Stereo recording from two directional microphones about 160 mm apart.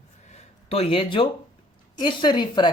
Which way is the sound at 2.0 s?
30° left (ahead or behind).